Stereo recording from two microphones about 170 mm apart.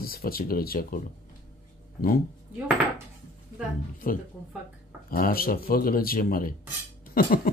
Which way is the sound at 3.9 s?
55° left (ahead or behind).